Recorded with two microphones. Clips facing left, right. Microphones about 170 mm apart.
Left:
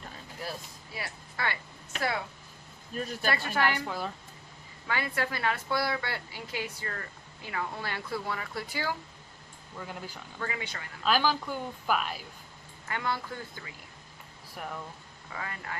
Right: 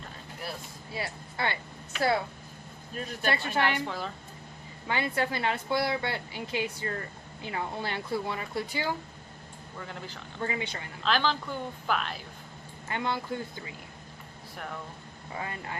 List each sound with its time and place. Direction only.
0.9 s a woman's voice: 25° right (ahead or behind)
3.2 s a woman's voice: 25° right (ahead or behind)
3.8 s speech: 5° left (ahead or behind)
4.9 s a woman's voice: 25° right (ahead or behind)
9.8 s a woman's voice: 5° left (ahead or behind)
10.4 s a woman's voice: 25° right (ahead or behind)
11.0 s a woman's voice: 5° left (ahead or behind)
12.9 s a woman's voice: 20° right (ahead or behind)
15.3 s a woman's voice: 25° right (ahead or behind)